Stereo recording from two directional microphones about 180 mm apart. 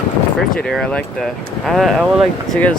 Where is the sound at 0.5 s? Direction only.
5° left (ahead or behind).